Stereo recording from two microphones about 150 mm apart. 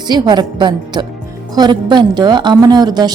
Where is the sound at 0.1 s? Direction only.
30° right (ahead or behind).